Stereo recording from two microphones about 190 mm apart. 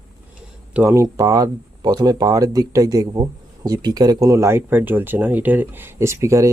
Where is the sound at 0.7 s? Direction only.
10° right (ahead or behind).